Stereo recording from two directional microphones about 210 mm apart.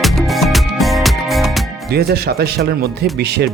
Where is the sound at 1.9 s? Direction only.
50° right (ahead or behind).